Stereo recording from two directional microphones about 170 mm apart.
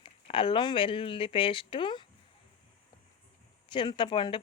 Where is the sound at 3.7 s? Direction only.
30° left (ahead or behind).